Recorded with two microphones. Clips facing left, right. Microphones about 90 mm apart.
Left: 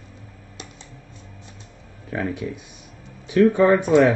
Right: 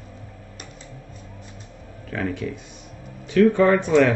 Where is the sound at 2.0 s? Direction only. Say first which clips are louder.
Even; 20° left (ahead or behind).